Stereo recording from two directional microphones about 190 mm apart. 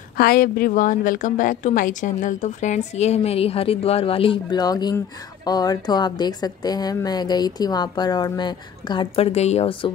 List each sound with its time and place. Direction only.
0.2 s a woman's voice: 50° left (ahead or behind); by 9.9 s 25° left (ahead or behind)